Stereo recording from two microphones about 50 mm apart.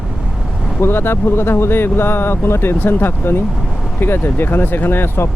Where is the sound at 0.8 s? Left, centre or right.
Left.